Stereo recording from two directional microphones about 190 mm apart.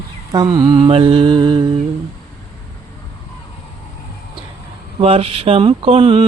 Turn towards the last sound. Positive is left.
turn(degrees=-30)  # may be behind; listen again after turning